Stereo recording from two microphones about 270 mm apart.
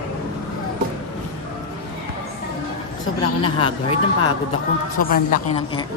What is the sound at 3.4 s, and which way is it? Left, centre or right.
Speech, centre.